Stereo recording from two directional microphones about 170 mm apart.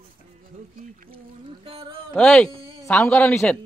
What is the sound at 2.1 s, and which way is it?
A man's voice, 5° left (ahead or behind).